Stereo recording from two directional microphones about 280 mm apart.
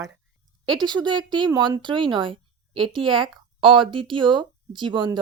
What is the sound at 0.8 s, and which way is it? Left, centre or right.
Speech, centre.